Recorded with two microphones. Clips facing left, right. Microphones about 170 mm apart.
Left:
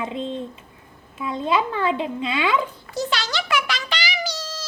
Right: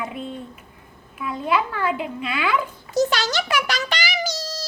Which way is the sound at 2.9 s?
45° right (ahead or behind).